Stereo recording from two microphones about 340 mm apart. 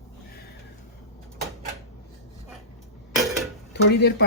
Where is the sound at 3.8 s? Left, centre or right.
Left.